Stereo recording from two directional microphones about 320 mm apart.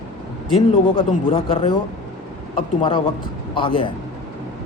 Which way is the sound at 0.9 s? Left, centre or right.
Centre.